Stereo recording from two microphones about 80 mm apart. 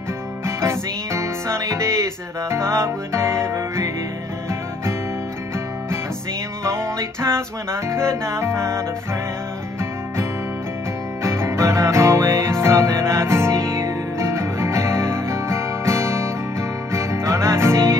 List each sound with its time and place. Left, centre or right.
0.6 s music: right
6.6 s music: right
11.2 s music: right